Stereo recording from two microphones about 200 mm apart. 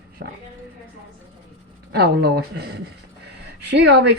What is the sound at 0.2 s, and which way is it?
Speech, 55° right (ahead or behind).